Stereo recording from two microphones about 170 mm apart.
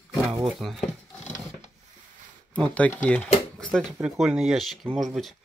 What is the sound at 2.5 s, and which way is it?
Speech, 5° left (ahead or behind).